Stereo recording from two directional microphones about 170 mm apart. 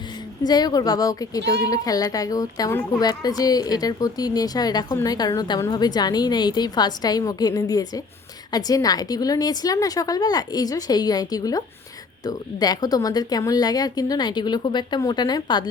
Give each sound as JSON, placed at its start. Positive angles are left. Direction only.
{"t": 0.4, "sound": "a woman's voice", "side_deg": 25}
{"t": 1.4, "sound": "a child's voice", "side_deg": -75}
{"t": 1.6, "sound": "a woman's voice", "side_deg": 20}